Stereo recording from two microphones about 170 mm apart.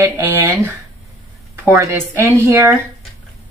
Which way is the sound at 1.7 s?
15° right (ahead or behind).